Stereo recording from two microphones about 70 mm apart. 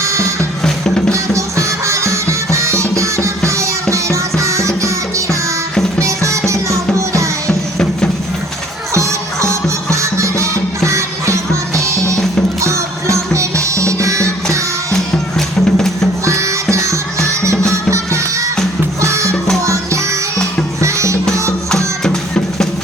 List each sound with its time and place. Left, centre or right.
0.6 s music: centre
1.1 s music: right
9.0 s music: right
14.9 s music: centre
16.2 s music: right
19.6 s music: right
22.0 s music: centre